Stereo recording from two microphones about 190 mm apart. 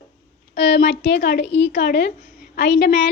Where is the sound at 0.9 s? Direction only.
70° left (ahead or behind).